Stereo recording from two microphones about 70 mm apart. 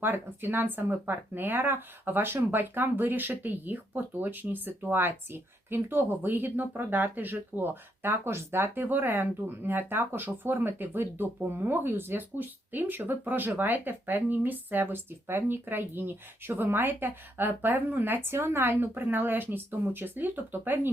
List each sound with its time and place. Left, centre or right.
0.0 s speech: right